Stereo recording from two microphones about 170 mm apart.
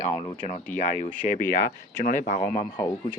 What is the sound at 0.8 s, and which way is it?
Speech, 50° left (ahead or behind).